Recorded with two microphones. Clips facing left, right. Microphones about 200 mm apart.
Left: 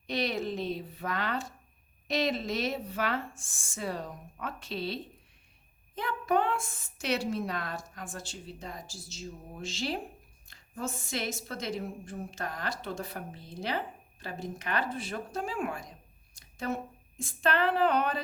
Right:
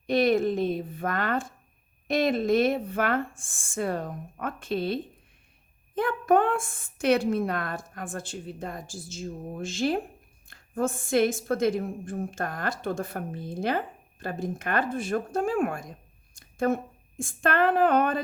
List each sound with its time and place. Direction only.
0.1 s a woman's voice: 50° right (ahead or behind)